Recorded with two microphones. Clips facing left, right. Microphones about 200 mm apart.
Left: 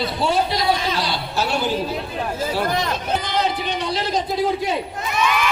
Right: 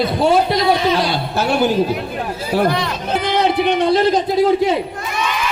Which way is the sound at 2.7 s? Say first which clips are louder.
Right 4 dB; 45° left (ahead or behind).